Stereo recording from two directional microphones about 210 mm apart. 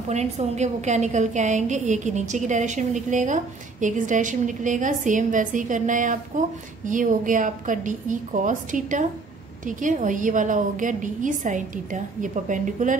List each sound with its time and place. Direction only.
0.1 s a woman's voice: 30° right (ahead or behind)